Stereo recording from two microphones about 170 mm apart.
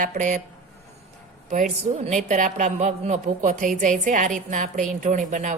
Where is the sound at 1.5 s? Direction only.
50° right (ahead or behind).